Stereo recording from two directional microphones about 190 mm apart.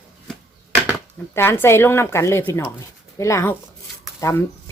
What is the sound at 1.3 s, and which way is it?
Speech, 10° left (ahead or behind).